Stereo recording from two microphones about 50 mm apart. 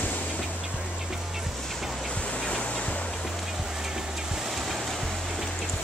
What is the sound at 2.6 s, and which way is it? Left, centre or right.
Music, left.